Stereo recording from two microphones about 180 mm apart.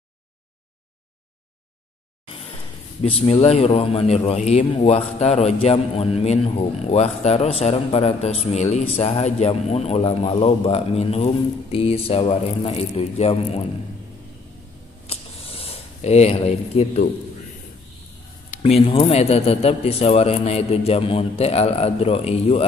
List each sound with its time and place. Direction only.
3.0 s a man's voice: 35° left (ahead or behind)
15.0 s a sound: 35° left (ahead or behind)
18.5 s a man's voice: 35° left (ahead or behind)